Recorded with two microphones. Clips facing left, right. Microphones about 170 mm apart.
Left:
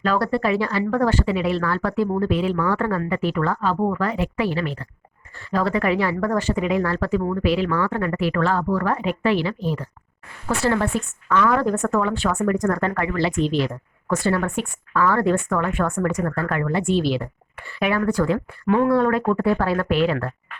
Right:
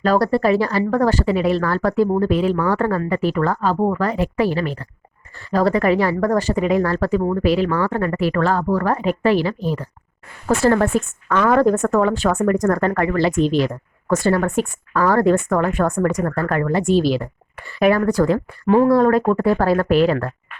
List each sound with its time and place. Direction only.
0.0 s a woman's voice: 40° right (ahead or behind)